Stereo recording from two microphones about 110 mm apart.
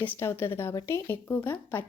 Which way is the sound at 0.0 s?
20° left (ahead or behind).